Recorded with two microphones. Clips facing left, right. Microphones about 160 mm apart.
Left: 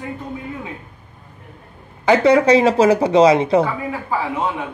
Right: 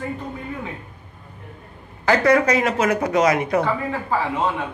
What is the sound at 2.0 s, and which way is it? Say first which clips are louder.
Speech: left 4 dB; 20° left (ahead or behind).